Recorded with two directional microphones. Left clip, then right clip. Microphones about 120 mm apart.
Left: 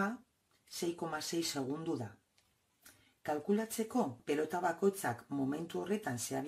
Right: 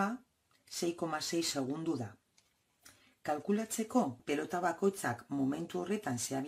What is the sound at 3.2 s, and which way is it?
Speech, 35° right (ahead or behind).